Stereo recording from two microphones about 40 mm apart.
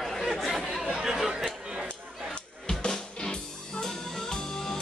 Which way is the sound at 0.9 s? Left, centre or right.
Centre.